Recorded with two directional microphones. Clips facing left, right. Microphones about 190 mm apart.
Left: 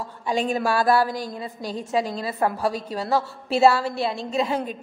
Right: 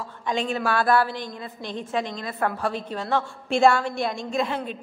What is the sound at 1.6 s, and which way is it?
Speech, 35° left (ahead or behind).